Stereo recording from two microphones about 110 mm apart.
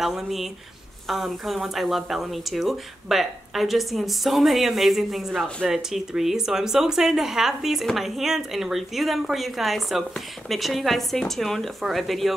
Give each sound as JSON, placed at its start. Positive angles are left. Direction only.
{"t": 0.0, "sound": "a woman's voice", "side_deg": 0}